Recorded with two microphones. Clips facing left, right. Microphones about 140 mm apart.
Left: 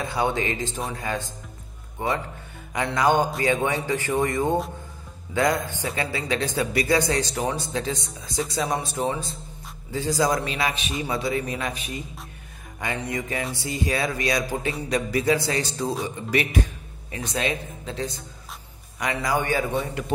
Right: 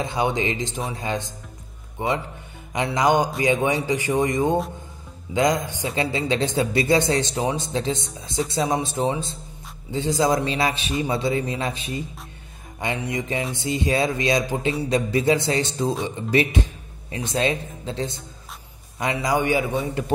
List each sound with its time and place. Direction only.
0.0 s speech: 20° right (ahead or behind)
12.9 s speech: 10° right (ahead or behind)
13.6 s speech: 25° right (ahead or behind)
19.2 s speech: 15° right (ahead or behind)